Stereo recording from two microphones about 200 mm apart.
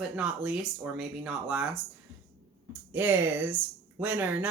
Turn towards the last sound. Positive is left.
turn(degrees=-10)  # may be behind; listen again after turning